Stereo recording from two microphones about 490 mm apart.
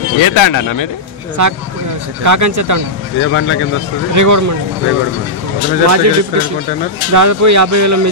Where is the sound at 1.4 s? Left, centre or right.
Right.